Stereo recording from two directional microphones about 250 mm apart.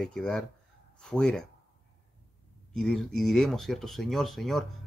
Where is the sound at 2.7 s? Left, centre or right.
Centre.